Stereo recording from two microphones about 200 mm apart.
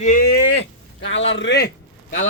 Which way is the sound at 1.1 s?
70° left (ahead or behind).